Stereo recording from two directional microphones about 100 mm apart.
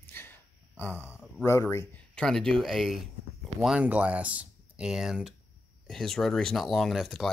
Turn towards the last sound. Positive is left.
turn(degrees=0)  # may be behind; listen again after turning